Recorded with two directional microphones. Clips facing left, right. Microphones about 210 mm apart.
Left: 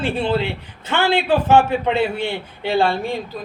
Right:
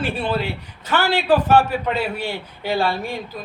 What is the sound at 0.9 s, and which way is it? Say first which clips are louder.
A man's voice: even; 25° left (ahead or behind).